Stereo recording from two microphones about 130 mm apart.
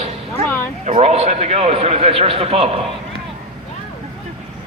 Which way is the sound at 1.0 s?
50° right (ahead or behind).